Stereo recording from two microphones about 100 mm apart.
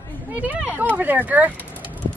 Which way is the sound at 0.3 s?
15° right (ahead or behind).